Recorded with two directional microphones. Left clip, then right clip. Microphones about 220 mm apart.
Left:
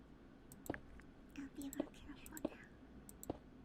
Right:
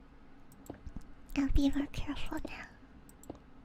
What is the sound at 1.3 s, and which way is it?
Speech, 65° right (ahead or behind).